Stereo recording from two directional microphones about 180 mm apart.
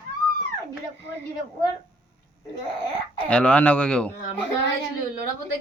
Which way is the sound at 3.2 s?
5° left (ahead or behind).